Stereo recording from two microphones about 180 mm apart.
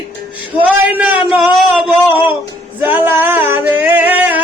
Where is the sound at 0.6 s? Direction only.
10° right (ahead or behind).